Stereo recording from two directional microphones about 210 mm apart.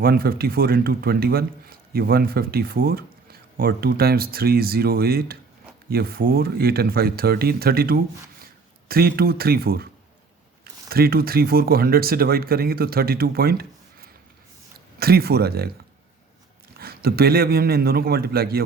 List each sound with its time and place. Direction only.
0.0 s speech: 45° right (ahead or behind)
16.7 s speech: 45° right (ahead or behind)